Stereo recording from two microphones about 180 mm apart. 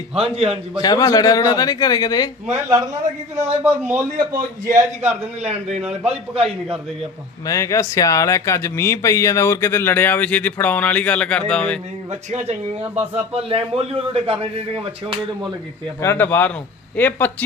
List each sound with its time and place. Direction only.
0.1 s a man's voice: 35° right (ahead or behind)
0.8 s a man's voice: 20° left (ahead or behind)
3.3 s a man's voice: 15° right (ahead or behind)
5.6 s a man's voice: centre (ahead or behind)
7.4 s speech: 15° left (ahead or behind)
12.3 s a man's voice: 35° right (ahead or behind)
16.0 s speech: 10° left (ahead or behind)